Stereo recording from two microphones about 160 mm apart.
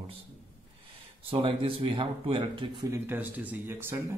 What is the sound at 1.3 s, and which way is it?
Mantra, 35° right (ahead or behind).